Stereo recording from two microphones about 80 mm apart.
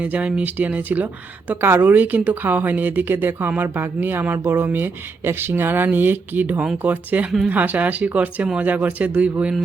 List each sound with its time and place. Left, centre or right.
0.0 s speech: centre